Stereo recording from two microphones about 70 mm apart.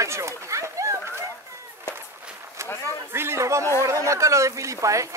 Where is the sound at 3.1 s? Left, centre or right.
Right.